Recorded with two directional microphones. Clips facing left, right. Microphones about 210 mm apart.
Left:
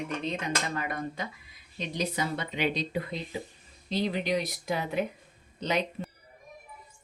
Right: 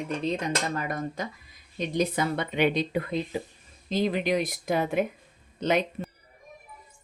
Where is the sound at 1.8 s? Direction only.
55° right (ahead or behind).